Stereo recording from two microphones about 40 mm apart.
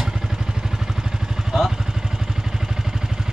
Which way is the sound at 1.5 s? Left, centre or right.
Centre.